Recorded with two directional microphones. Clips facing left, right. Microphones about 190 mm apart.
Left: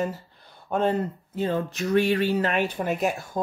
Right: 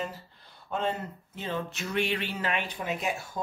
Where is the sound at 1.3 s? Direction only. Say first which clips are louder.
Left 8 dB; 40° left (ahead or behind).